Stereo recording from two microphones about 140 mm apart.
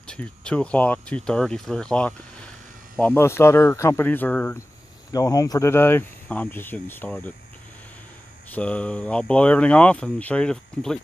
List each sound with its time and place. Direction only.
0.0 s speech: 5° left (ahead or behind)
3.2 s speech: 20° left (ahead or behind)
5.1 s speech: 25° left (ahead or behind)
8.5 s speech: 10° left (ahead or behind)